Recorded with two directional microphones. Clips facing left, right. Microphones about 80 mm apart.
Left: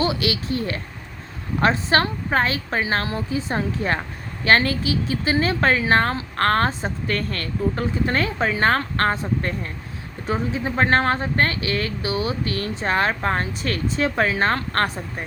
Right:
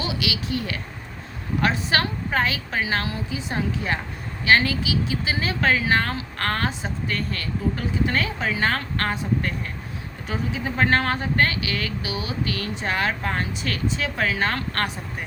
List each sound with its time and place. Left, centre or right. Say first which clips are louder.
0.0 s speech: left 5 dB; left